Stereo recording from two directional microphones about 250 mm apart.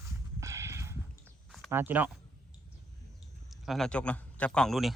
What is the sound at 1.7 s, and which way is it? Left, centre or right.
Speech, centre.